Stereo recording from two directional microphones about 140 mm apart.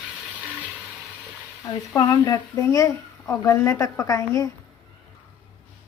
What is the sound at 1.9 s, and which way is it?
Speech, 25° left (ahead or behind).